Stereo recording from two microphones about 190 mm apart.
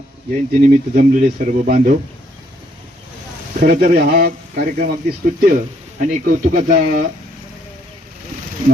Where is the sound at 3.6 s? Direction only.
40° right (ahead or behind).